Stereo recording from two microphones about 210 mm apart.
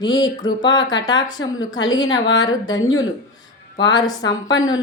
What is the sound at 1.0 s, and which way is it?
Speech, 60° left (ahead or behind).